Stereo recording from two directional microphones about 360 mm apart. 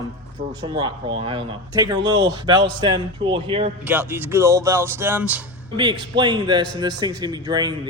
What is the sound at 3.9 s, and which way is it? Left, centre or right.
Speech, centre.